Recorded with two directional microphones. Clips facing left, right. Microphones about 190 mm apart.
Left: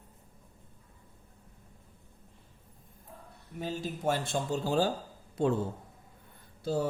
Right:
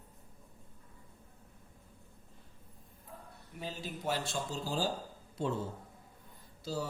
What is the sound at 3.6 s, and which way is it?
Speech, 45° left (ahead or behind).